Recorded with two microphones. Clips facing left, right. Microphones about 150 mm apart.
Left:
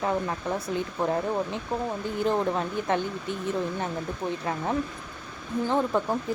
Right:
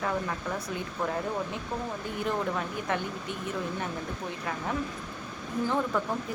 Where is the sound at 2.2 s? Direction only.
30° left (ahead or behind).